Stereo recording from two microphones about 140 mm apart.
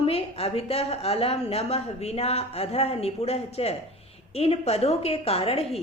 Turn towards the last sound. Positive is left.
turn(degrees=45)  # may be behind; listen again after turning